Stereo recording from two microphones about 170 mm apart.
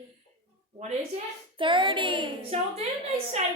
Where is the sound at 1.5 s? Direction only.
30° right (ahead or behind).